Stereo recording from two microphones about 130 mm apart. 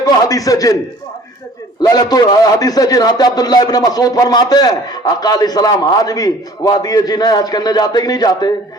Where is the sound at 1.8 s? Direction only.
30° left (ahead or behind).